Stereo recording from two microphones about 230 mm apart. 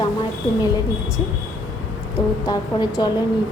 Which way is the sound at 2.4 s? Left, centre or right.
Centre.